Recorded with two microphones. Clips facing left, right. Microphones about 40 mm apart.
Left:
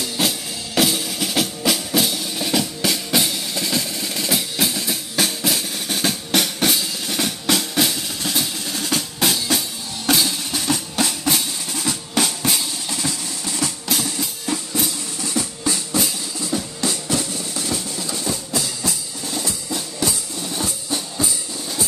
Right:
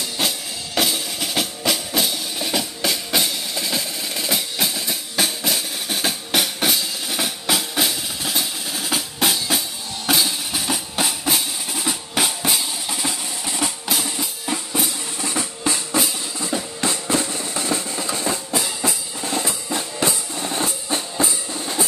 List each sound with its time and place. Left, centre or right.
0.2 s music: centre
13.0 s a sound: right
13.8 s music: centre
14.2 s drum: centre
15.2 s drum: right
16.3 s music: right